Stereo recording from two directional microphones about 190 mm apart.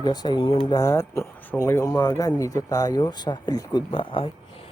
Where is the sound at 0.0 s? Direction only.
20° left (ahead or behind).